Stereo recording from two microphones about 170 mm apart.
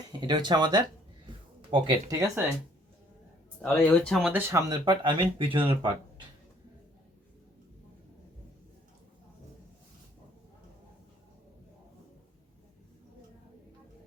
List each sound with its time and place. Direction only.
0.3 s speech: 25° right (ahead or behind)
2.1 s speech: 15° right (ahead or behind)
3.6 s speech: 5° left (ahead or behind)
4.4 s speech: 15° right (ahead or behind)